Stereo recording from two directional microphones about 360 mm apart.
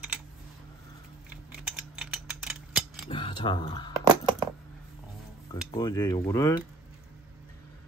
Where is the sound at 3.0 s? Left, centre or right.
Centre.